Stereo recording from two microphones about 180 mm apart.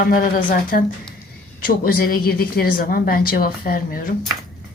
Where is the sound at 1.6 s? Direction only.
55° left (ahead or behind).